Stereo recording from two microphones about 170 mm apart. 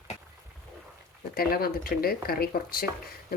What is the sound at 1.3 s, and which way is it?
A woman's voice, 60° left (ahead or behind).